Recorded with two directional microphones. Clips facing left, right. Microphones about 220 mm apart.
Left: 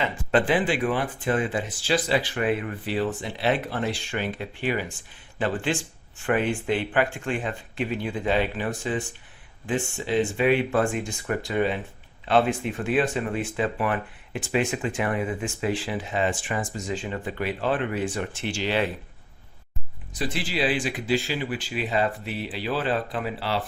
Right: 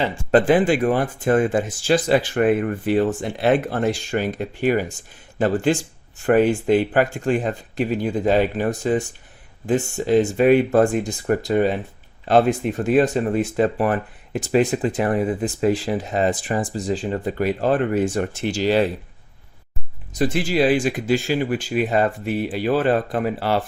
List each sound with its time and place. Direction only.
0.0 s speech: 35° right (ahead or behind)
20.1 s speech: 45° right (ahead or behind)